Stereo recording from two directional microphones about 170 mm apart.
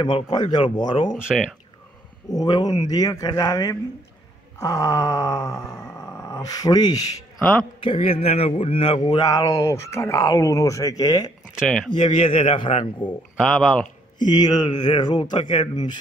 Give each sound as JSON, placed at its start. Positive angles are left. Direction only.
{"t": 0.0, "sound": "speech", "side_deg": 25}
{"t": 1.1, "sound": "speech", "side_deg": -5}
{"t": 2.3, "sound": "speech", "side_deg": 25}
{"t": 4.6, "sound": "groan", "side_deg": 20}
{"t": 7.8, "sound": "a man's voice", "side_deg": 30}
{"t": 9.0, "sound": "speech", "side_deg": 20}
{"t": 11.5, "sound": "speech", "side_deg": 0}
{"t": 11.9, "sound": "a man's voice", "side_deg": 30}
{"t": 13.4, "sound": "speech", "side_deg": 0}
{"t": 14.1, "sound": "speech", "side_deg": 25}